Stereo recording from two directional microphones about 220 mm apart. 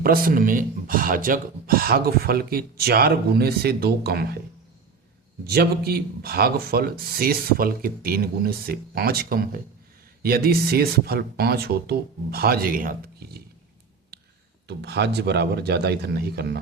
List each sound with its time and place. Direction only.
0.0 s speech: 40° right (ahead or behind)
5.5 s speech: 45° right (ahead or behind)
14.1 s a sound: 45° right (ahead or behind)
14.7 s speech: 50° right (ahead or behind)